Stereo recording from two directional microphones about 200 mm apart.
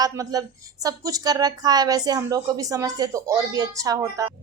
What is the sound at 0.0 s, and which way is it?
A woman's voice, 20° right (ahead or behind).